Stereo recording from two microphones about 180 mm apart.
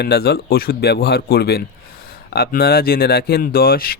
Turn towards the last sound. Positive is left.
turn(degrees=55)  # may be behind; listen again after turning